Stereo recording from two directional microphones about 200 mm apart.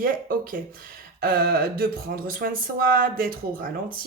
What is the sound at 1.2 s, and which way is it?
A woman's voice, 50° right (ahead or behind).